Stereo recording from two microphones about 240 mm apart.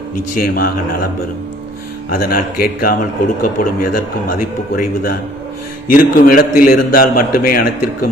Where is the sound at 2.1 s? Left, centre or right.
Left.